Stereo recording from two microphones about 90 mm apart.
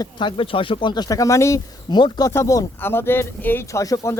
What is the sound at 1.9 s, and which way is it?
Speech, 55° left (ahead or behind).